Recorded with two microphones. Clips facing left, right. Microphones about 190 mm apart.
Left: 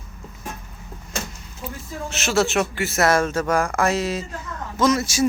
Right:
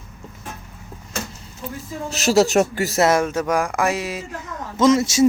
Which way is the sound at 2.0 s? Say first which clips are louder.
Right 5 dB; 40° right (ahead or behind).